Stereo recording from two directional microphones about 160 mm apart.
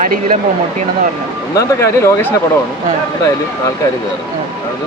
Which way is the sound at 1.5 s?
15° left (ahead or behind).